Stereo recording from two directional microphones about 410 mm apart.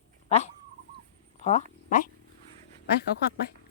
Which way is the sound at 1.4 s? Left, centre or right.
Centre.